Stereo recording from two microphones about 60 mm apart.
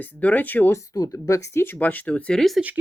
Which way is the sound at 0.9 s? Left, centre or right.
Left.